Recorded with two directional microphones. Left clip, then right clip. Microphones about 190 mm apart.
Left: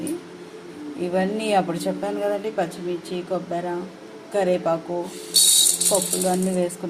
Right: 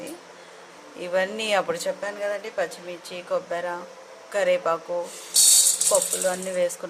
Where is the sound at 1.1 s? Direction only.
25° right (ahead or behind).